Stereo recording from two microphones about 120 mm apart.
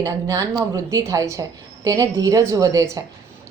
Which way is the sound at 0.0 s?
30° right (ahead or behind).